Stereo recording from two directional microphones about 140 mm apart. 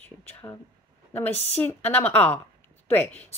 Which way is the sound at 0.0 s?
15° left (ahead or behind).